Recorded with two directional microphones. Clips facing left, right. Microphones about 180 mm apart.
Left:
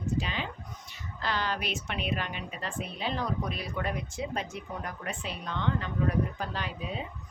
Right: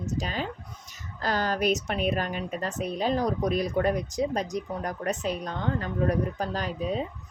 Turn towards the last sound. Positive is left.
turn(degrees=-40)  # may be behind; listen again after turning